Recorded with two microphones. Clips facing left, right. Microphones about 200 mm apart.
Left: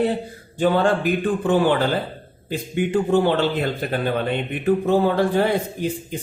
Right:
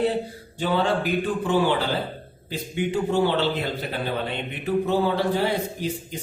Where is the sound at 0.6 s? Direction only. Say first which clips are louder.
Left 5 dB; 50° left (ahead or behind).